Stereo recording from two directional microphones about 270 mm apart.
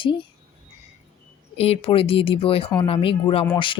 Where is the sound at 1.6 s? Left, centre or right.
Left.